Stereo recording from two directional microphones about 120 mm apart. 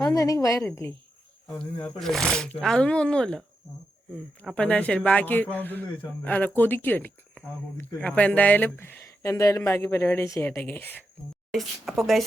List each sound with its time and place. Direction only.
0.0 s speech: 30° left (ahead or behind)
2.0 s a man's voice: 5° left (ahead or behind)
4.5 s a man's voice: 10° left (ahead or behind)
11.5 s speech: centre (ahead or behind)